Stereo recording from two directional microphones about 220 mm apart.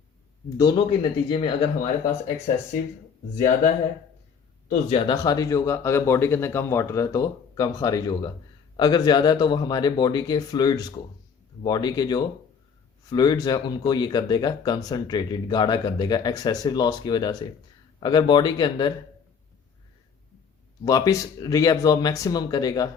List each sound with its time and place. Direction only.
0.5 s speech: 20° left (ahead or behind)
4.7 s speech: 25° left (ahead or behind)
20.8 s speech: 15° left (ahead or behind)